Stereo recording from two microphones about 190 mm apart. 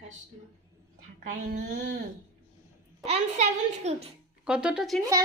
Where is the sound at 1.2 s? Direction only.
45° right (ahead or behind).